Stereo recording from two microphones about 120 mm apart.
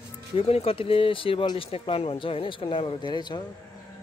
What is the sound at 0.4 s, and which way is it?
Speech, 55° left (ahead or behind).